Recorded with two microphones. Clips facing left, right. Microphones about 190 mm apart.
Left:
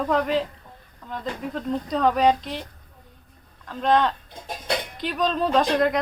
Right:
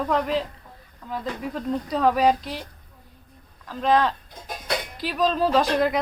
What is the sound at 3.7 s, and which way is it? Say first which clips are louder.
Speech: even; centre (ahead or behind).